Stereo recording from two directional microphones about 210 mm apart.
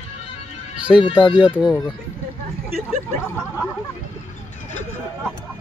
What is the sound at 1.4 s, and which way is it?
Speech, 5° right (ahead or behind).